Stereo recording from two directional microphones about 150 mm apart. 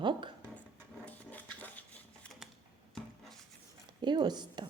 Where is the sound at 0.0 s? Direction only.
30° right (ahead or behind).